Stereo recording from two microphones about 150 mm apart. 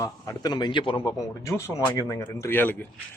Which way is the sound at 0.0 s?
25° left (ahead or behind).